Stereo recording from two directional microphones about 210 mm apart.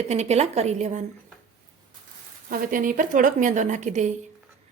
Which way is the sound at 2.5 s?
40° right (ahead or behind).